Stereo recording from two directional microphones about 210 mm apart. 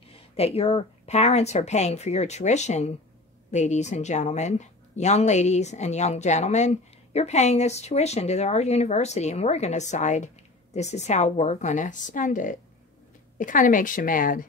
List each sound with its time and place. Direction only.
0.1 s a woman's voice: 30° left (ahead or behind)